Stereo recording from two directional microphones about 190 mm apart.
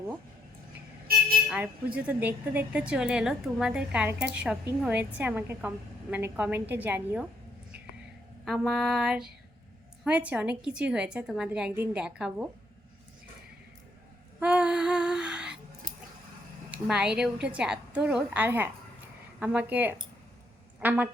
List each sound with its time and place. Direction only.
1.5 s a woman's voice: 10° right (ahead or behind)
8.4 s speech: centre (ahead or behind)
14.3 s humming: 5° right (ahead or behind)
15.8 s a sound: 45° right (ahead or behind)
16.7 s a woman's voice: 5° right (ahead or behind)